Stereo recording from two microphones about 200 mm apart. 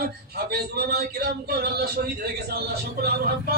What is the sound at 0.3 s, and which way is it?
Music, 50° right (ahead or behind).